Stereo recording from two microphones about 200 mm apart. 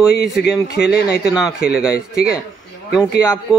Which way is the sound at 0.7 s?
55° left (ahead or behind).